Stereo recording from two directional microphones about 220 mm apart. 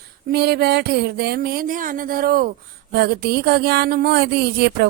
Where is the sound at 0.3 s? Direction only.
45° right (ahead or behind).